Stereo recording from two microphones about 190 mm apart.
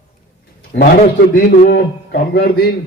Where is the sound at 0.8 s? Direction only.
50° left (ahead or behind).